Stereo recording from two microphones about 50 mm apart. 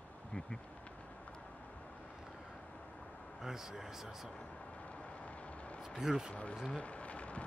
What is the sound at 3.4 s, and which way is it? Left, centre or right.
Speech, centre.